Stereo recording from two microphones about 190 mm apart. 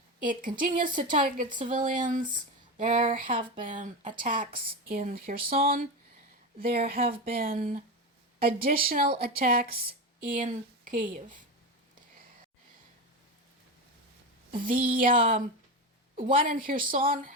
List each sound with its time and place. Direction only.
0.2 s speech: 45° right (ahead or behind)
14.5 s speech: 45° right (ahead or behind)